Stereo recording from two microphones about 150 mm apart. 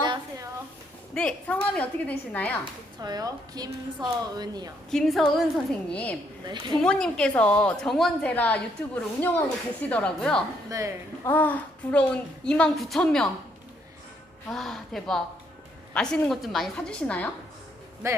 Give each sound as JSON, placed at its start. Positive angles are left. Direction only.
{"t": 0.0, "sound": "a sound", "side_deg": -30}
{"t": 1.1, "sound": "a woman's voice", "side_deg": 5}
{"t": 3.0, "sound": "a woman's voice", "side_deg": -25}
{"t": 4.9, "sound": "a woman's voice", "side_deg": 0}
{"t": 6.4, "sound": "a woman's voice", "side_deg": -30}
{"t": 6.8, "sound": "a woman's voice", "side_deg": 5}
{"t": 10.7, "sound": "a woman's voice", "side_deg": -20}
{"t": 11.3, "sound": "a woman's voice", "side_deg": 10}
{"t": 14.5, "sound": "a woman's voice", "side_deg": 0}